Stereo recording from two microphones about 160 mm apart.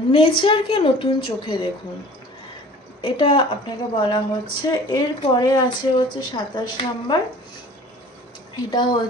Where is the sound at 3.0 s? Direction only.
35° left (ahead or behind).